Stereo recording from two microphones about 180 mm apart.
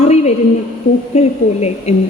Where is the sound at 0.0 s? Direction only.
40° left (ahead or behind).